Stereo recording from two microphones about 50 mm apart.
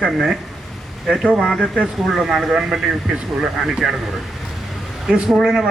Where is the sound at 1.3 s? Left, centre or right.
Centre.